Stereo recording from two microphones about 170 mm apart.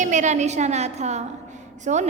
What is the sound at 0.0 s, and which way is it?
A woman's voice, 45° right (ahead or behind).